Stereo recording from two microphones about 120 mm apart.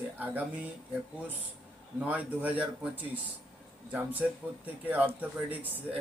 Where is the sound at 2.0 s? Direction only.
10° right (ahead or behind).